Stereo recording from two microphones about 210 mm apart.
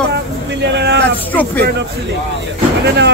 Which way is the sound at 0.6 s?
55° right (ahead or behind).